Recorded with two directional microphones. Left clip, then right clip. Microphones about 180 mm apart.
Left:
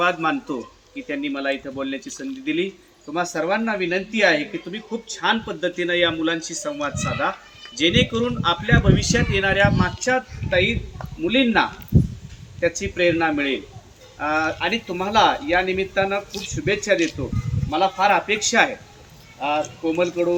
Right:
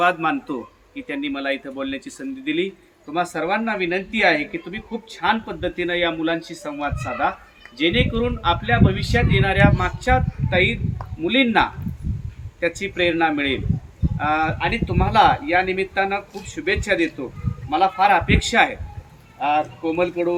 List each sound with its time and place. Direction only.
0.0 s a man's voice: 5° right (ahead or behind)